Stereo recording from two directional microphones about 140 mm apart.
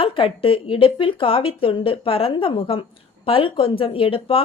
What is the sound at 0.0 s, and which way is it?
Speech, 40° left (ahead or behind).